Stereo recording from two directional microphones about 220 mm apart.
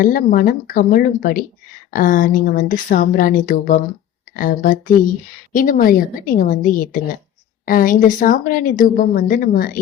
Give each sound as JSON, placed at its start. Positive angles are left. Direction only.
{"t": 0.0, "sound": "a woman's voice", "side_deg": 40}